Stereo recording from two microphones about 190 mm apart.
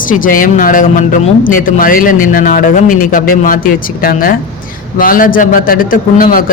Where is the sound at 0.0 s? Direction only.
45° left (ahead or behind).